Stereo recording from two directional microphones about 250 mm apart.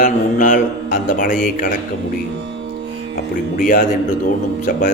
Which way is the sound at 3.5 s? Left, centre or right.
Left.